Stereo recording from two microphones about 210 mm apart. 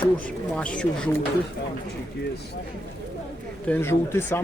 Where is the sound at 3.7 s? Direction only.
10° left (ahead or behind).